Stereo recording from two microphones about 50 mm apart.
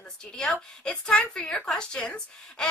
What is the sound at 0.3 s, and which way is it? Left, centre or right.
A woman's voice, centre.